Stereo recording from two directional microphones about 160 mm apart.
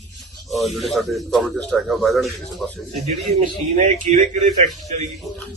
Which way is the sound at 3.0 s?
45° right (ahead or behind).